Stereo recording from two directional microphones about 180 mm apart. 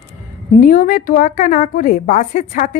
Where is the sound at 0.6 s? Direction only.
50° left (ahead or behind).